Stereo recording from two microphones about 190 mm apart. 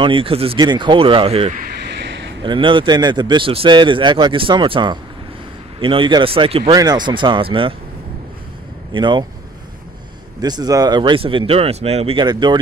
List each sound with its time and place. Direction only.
0.0 s speech: 30° right (ahead or behind)
2.0 s a sound: 65° right (ahead or behind)
2.4 s speech: 25° right (ahead or behind)
8.9 s speech: 25° right (ahead or behind)
10.4 s speech: 20° right (ahead or behind)